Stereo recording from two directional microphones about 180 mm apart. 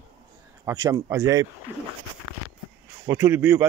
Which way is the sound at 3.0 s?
10° right (ahead or behind).